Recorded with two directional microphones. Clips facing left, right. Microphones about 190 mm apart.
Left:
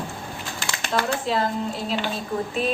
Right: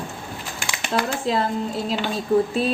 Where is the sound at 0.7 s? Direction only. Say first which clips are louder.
Right 1 dB; 10° right (ahead or behind).